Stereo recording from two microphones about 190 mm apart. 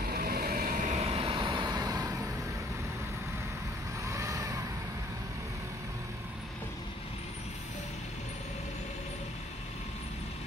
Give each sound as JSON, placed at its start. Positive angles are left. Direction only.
{"t": 0.0, "sound": "vehicle", "side_deg": -55}
{"t": 4.1, "sound": "vehicle", "side_deg": -15}